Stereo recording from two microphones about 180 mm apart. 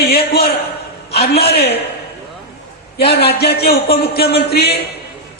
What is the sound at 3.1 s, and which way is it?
Speech, 60° left (ahead or behind).